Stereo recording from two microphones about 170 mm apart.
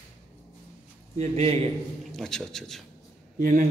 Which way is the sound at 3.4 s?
55° right (ahead or behind).